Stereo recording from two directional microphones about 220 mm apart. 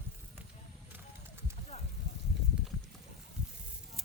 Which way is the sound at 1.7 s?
30° left (ahead or behind).